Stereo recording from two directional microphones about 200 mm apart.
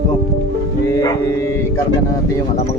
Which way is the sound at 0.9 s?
15° left (ahead or behind).